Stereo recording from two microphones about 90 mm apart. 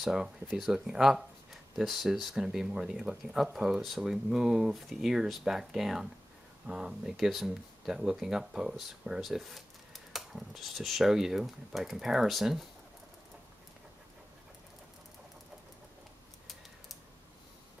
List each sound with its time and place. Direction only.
0.0 s speech: 5° right (ahead or behind)